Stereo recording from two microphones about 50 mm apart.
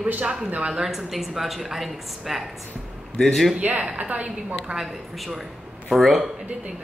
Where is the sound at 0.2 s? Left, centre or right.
Centre.